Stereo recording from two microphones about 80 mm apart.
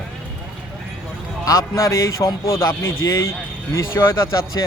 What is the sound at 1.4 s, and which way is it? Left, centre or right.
Speech, left.